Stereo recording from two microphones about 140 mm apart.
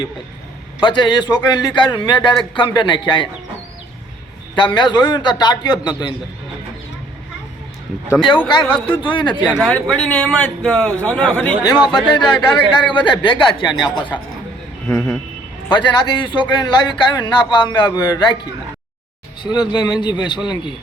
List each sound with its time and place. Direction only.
0.8 s a man's voice: 35° left (ahead or behind)
4.5 s a man's voice: 35° left (ahead or behind)
9.0 s a man's voice: 35° left (ahead or behind)
9.6 s a man's voice: 5° left (ahead or behind)
11.6 s a man's voice: 30° left (ahead or behind)
14.8 s speech: 10° left (ahead or behind)
15.7 s a man's voice: 35° left (ahead or behind)
19.4 s a man's voice: 30° left (ahead or behind)